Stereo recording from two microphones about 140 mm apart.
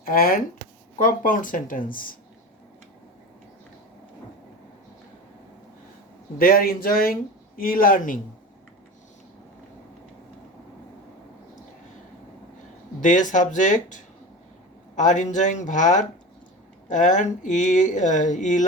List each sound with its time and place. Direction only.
0.0 s speech: 90° left
0.9 s speech: 75° left (ahead or behind)
6.4 s speech: 90° left
13.0 s speech: 65° left (ahead or behind)